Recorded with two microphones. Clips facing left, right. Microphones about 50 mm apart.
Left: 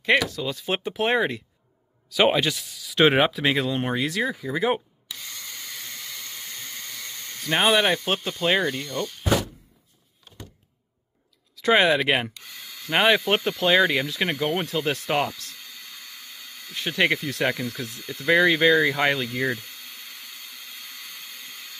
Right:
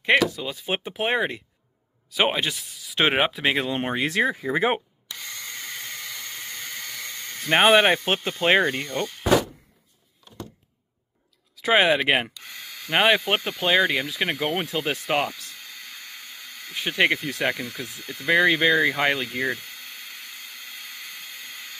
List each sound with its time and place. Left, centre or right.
0.0 s speech: centre
3.4 s speech: right
6.4 s speech: right
11.6 s speech: centre
16.7 s speech: centre